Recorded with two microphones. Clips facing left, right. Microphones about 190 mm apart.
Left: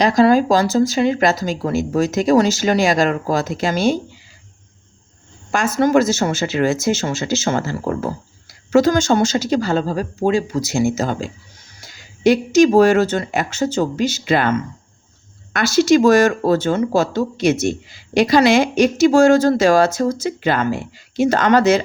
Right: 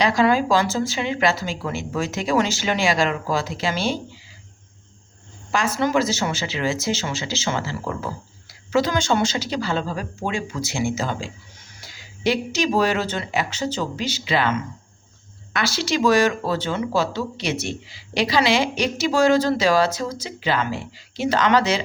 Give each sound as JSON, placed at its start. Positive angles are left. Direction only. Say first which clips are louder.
{"t": 0.0, "sound": "speech", "louder": "left 5 dB", "side_deg": 40}
{"t": 5.5, "sound": "speech", "louder": "left 5 dB", "side_deg": 45}
{"t": 15.5, "sound": "speech", "louder": "left 10 dB", "side_deg": 45}